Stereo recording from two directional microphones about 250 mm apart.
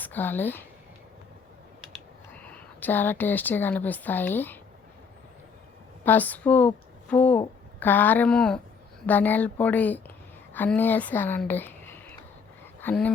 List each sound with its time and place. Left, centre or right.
0.0 s speech: centre
2.3 s speech: centre
6.1 s a woman's voice: centre